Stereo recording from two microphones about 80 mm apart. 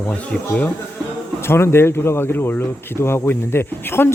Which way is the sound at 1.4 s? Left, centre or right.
Left.